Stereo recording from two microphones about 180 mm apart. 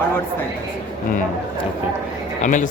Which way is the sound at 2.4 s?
45° left (ahead or behind).